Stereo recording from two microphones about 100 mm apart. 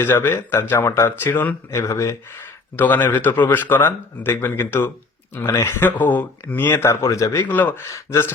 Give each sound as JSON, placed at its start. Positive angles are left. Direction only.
{"t": 0.0, "sound": "speech", "side_deg": 25}
{"t": 1.8, "sound": "speech", "side_deg": 30}
{"t": 2.7, "sound": "speech", "side_deg": 20}
{"t": 7.4, "sound": "speech", "side_deg": 20}
{"t": 7.9, "sound": "speech", "side_deg": 30}